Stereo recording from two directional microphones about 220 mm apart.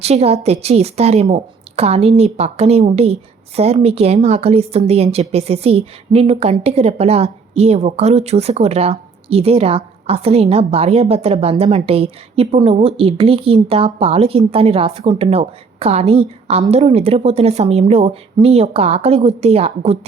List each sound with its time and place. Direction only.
0.0 s a woman's voice: 30° right (ahead or behind)